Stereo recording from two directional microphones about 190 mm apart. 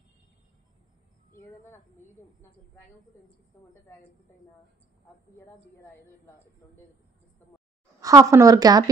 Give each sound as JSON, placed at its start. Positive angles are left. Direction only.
{"t": 1.4, "sound": "speech", "side_deg": 10}
{"t": 5.4, "sound": "a woman's voice", "side_deg": 10}
{"t": 8.0, "sound": "a woman's voice", "side_deg": -15}